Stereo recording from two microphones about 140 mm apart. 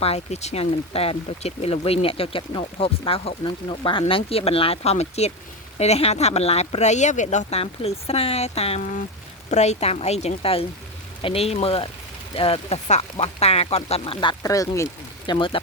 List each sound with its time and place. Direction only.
0.0 s speech: 50° left (ahead or behind)
14.4 s speech: 25° left (ahead or behind)
15.3 s speech: 35° left (ahead or behind)